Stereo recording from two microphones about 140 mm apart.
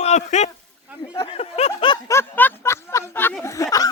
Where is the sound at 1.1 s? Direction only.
40° left (ahead or behind).